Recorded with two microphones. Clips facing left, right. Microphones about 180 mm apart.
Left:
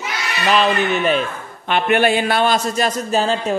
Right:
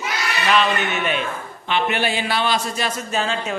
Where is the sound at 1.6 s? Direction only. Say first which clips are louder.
Left 6 dB; 55° left (ahead or behind); by 3.5 s 35° left (ahead or behind).